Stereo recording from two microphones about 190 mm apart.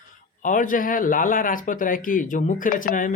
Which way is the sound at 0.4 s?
45° left (ahead or behind).